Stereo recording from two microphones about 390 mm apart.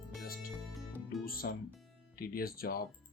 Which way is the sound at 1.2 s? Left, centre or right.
Left.